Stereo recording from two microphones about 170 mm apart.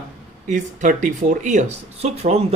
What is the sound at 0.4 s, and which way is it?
Speech, 50° right (ahead or behind).